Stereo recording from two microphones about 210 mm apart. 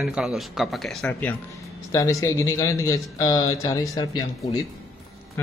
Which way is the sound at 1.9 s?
15° left (ahead or behind).